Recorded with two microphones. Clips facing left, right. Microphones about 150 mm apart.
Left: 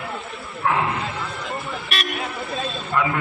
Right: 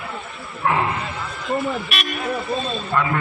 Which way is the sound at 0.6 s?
Centre (ahead or behind).